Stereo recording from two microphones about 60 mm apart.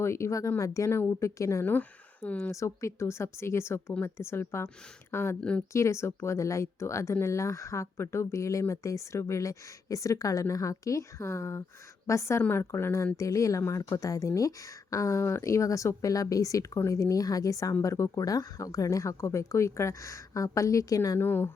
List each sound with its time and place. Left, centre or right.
0.0 s speech: left
0.9 s speech: left
1.4 s speech: left
1.6 s speech: left
2.5 s speech: left
5.4 s speech: centre
5.7 s speech: left
12.5 s speech: left
17.8 s speech: left
21.2 s a woman's voice: left